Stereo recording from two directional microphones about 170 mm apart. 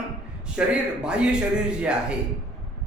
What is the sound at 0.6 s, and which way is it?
A man's voice, 5° right (ahead or behind).